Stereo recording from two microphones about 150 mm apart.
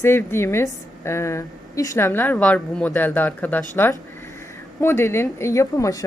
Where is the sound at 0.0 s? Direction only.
15° left (ahead or behind).